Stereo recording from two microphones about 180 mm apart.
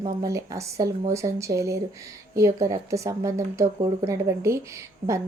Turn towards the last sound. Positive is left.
turn(degrees=-15)  # may be behind; listen again after turning